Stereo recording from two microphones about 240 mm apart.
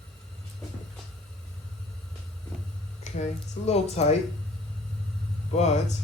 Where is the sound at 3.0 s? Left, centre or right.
Left.